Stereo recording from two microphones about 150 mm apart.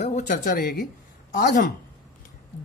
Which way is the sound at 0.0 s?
55° left (ahead or behind).